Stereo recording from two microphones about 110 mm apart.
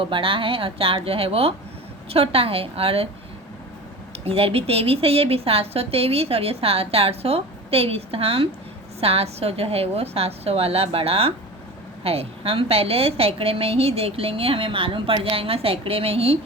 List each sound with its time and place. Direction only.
0.0 s a woman's voice: 50° right (ahead or behind)
4.3 s a woman's voice: 60° right (ahead or behind)